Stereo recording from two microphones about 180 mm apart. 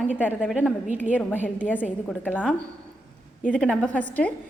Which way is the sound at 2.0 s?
10° left (ahead or behind).